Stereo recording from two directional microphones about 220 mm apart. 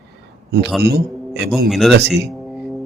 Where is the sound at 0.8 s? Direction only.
45° right (ahead or behind).